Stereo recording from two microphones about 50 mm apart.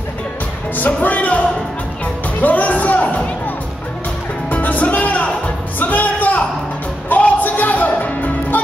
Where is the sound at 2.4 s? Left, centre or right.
Left.